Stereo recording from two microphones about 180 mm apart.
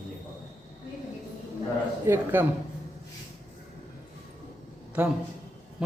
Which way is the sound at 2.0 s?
10° right (ahead or behind).